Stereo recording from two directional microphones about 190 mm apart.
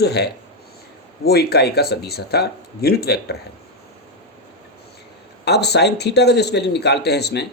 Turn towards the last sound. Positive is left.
turn(degrees=60)  # may be behind; listen again after turning